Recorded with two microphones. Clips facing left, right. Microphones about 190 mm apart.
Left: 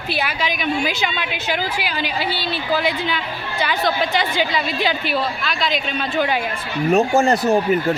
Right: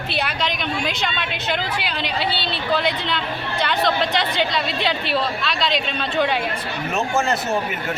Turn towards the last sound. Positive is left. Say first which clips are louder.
# left 6 dB
turn(degrees=35)  # may be behind; listen again after turning